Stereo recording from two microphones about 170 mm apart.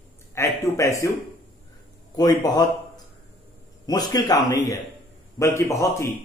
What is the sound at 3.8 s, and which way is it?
A man's voice, 25° left (ahead or behind).